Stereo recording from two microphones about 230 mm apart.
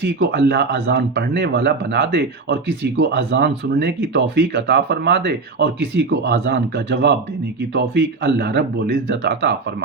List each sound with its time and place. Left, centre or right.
0.0 s speech: right